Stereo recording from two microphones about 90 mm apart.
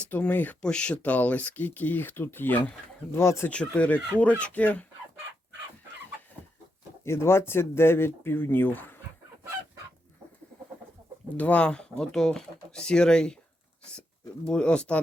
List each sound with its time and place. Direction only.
0.0 s speech: 20° left (ahead or behind)
3.5 s speech: 15° left (ahead or behind)
7.0 s speech: 30° left (ahead or behind)
11.3 s speech: 15° left (ahead or behind)
14.4 s speech: 10° left (ahead or behind)